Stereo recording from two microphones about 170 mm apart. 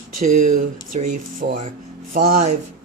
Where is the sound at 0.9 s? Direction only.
45° right (ahead or behind).